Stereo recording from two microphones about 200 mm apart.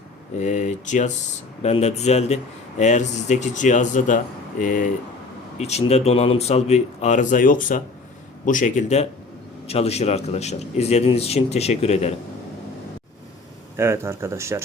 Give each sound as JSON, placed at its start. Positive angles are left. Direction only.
{"t": 0.3, "sound": "a man's voice", "side_deg": 35}
{"t": 13.7, "sound": "speech", "side_deg": -15}